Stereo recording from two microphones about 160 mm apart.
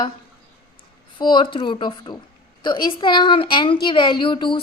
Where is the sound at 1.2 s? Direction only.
30° left (ahead or behind).